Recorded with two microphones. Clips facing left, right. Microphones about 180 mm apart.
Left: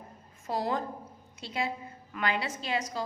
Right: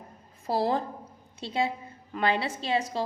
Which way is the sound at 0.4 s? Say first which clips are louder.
Right 4 dB; 30° right (ahead or behind).